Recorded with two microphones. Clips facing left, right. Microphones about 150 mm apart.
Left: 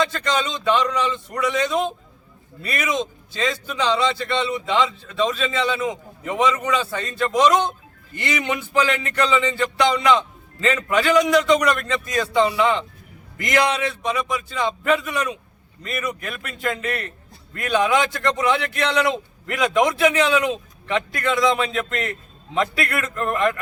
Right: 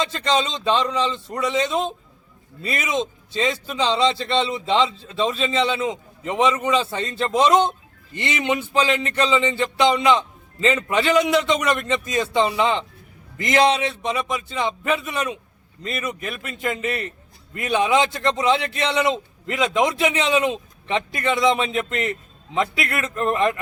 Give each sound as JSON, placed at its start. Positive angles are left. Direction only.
{"t": 0.0, "sound": "speech", "side_deg": -25}